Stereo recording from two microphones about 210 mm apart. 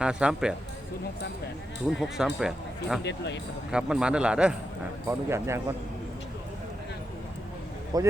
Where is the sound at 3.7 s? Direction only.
5° right (ahead or behind).